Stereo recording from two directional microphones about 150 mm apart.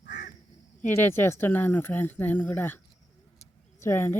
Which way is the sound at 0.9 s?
15° left (ahead or behind).